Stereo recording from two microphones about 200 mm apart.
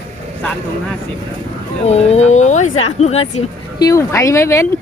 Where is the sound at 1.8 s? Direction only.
30° left (ahead or behind).